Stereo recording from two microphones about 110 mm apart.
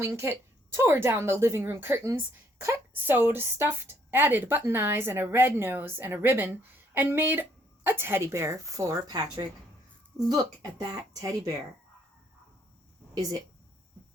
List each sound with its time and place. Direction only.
0.2 s a woman's voice: 25° right (ahead or behind)